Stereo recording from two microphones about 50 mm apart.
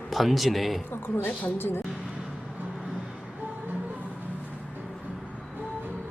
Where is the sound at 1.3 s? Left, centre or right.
Left.